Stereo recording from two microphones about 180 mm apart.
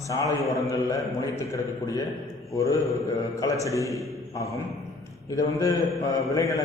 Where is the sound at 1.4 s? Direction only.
20° left (ahead or behind).